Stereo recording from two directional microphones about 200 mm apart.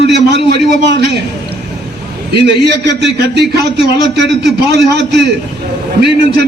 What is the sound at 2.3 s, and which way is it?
A man's voice, 55° right (ahead or behind).